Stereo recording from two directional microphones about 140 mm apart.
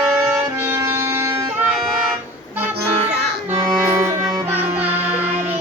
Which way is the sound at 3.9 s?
20° right (ahead or behind).